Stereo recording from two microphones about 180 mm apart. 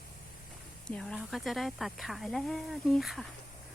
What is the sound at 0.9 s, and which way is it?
Speech, 5° left (ahead or behind).